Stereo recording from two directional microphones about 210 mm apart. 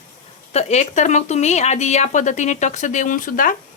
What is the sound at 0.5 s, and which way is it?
A woman's voice, 35° left (ahead or behind).